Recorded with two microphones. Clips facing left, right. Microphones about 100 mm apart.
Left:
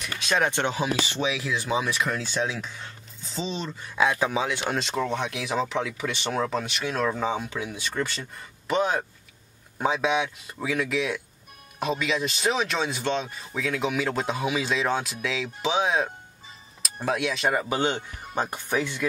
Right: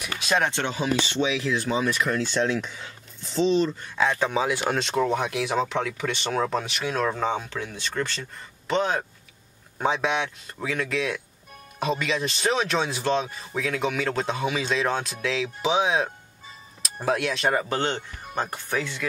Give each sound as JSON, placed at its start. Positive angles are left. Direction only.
{"t": 0.5, "sound": "speech", "side_deg": 15}
{"t": 1.3, "sound": "speech", "side_deg": 0}